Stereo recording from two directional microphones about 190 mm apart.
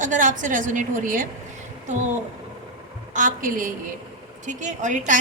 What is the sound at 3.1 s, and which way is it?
A woman's voice, 45° right (ahead or behind).